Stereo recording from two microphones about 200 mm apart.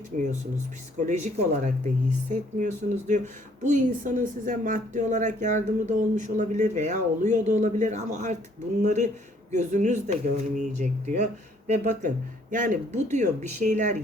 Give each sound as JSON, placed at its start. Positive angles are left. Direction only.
{"t": 0.1, "sound": "a woman's voice", "side_deg": -40}